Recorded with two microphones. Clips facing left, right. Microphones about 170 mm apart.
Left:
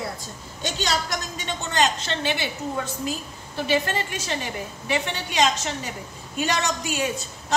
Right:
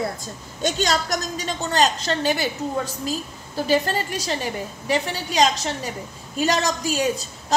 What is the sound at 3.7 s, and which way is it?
A woman's voice, 35° right (ahead or behind).